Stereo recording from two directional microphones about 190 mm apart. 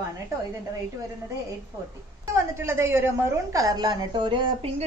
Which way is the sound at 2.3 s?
15° right (ahead or behind).